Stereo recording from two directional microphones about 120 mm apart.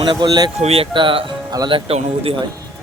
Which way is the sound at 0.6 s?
55° right (ahead or behind).